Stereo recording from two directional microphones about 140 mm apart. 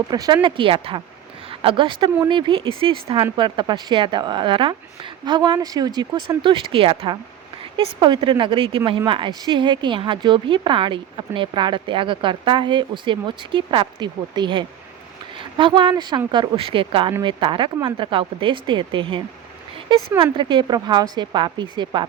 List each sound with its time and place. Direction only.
0.1 s a woman's voice: 30° right (ahead or behind)